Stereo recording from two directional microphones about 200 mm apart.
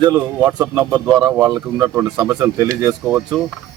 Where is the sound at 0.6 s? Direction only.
20° right (ahead or behind).